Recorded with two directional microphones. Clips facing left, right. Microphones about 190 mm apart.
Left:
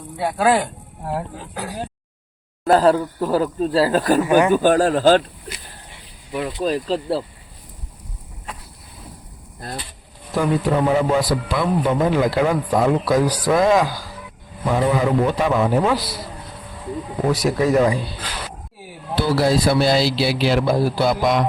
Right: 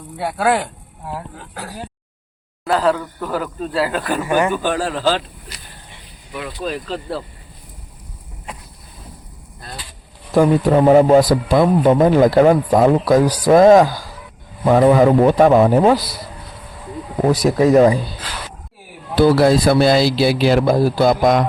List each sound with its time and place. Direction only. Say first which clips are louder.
0.3 s speech: even; 5° right (ahead or behind)
2.6 s speech: left 3 dB; 40° left (ahead or behind)
4.2 s speech: even; 10° left (ahead or behind)
4.5 s speech: left 5 dB; 45° left (ahead or behind)
6.3 s speech: left 4 dB; 35° left (ahead or behind)
10.4 s speech: right 5 dB; 45° right (ahead or behind)
17.2 s speech: right 5 dB; 40° right (ahead or behind)
19.1 s speech: right 6 dB; 55° right (ahead or behind)